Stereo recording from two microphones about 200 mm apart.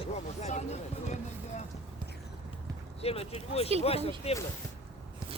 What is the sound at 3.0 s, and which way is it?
Speech, 30° left (ahead or behind).